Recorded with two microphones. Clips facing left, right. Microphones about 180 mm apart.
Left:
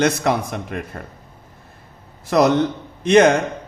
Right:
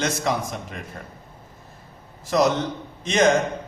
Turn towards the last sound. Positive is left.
turn(degrees=60)  # may be behind; listen again after turning